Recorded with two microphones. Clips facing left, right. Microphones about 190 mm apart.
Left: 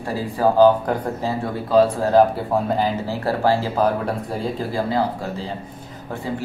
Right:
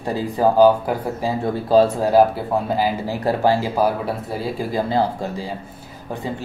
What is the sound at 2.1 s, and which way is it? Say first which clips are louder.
Speech: even; 5° right (ahead or behind).